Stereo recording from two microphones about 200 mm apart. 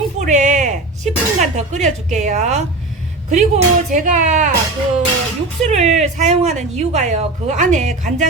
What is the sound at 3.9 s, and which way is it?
Speech, 40° right (ahead or behind).